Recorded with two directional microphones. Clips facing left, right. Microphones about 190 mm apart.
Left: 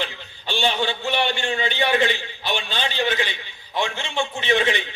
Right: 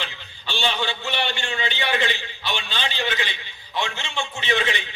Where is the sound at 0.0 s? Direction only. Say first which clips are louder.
Left 5 dB; 50° left (ahead or behind).